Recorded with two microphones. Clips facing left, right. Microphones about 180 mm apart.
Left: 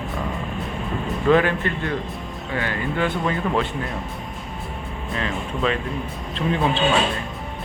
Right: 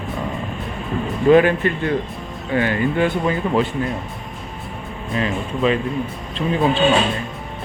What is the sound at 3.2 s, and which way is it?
Speech, 5° right (ahead or behind).